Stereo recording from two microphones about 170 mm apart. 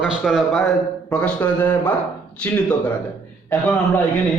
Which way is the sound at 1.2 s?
10° left (ahead or behind).